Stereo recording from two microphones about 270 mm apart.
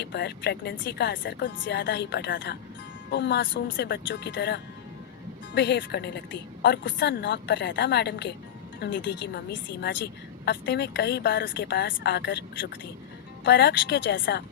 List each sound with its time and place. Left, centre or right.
0.0 s a woman's voice: left
10.4 s a woman's voice: left
13.4 s a woman's voice: left